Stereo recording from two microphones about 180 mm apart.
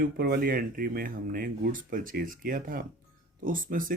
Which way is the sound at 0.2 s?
55° right (ahead or behind).